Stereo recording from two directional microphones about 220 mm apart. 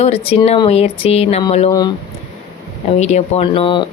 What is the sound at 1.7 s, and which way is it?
Speech, 15° left (ahead or behind).